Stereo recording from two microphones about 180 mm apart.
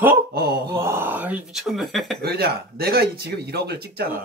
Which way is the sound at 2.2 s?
60° right (ahead or behind).